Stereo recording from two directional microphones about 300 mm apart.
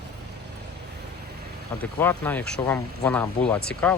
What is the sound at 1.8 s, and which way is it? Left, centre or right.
Speech, centre.